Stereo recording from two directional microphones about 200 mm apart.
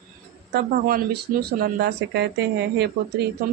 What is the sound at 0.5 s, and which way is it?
Speech, 45° right (ahead or behind).